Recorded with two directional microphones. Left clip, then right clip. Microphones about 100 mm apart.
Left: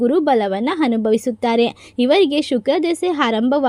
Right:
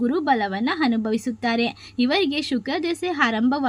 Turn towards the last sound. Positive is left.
turn(degrees=50)  # may be behind; listen again after turning